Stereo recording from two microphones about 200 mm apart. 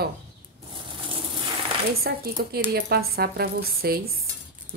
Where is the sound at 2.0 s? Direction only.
50° right (ahead or behind).